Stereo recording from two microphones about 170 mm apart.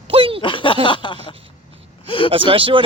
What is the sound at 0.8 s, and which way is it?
A man's voice, 30° left (ahead or behind).